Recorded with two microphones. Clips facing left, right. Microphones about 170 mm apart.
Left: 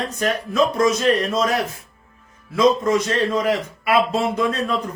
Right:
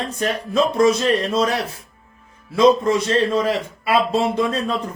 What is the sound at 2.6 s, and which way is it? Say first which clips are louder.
A man's voice: right 2 dB; 30° right (ahead or behind).